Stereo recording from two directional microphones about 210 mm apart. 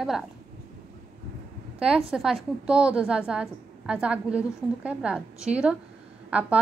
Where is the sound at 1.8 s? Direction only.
5° right (ahead or behind).